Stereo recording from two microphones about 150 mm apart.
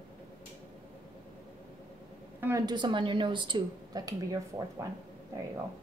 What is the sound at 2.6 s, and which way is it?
A woman's voice, 30° right (ahead or behind).